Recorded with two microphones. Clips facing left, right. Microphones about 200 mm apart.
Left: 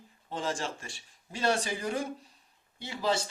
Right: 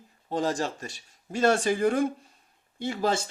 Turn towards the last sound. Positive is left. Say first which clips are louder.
# right 4 dB
turn(degrees=-50)  # may be behind; listen again after turning